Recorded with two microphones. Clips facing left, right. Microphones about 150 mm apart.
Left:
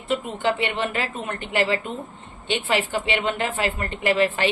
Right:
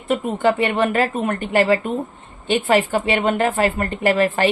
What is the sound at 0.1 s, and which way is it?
A woman's voice, 45° right (ahead or behind).